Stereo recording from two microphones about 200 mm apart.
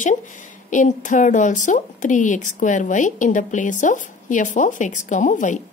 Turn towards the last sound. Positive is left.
turn(degrees=40)  # may be behind; listen again after turning